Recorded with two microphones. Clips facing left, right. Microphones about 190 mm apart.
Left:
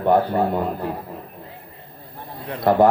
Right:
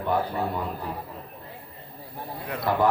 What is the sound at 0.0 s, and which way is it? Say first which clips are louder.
Speech: left 8 dB; 55° left (ahead or behind).